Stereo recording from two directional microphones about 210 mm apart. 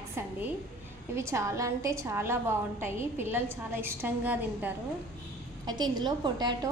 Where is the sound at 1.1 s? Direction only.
15° right (ahead or behind).